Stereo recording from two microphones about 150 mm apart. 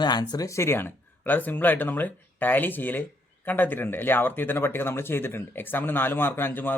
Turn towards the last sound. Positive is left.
turn(degrees=15)  # may be behind; listen again after turning